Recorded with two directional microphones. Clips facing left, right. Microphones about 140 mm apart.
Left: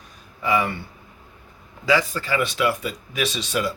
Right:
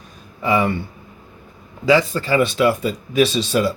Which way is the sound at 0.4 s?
30° right (ahead or behind).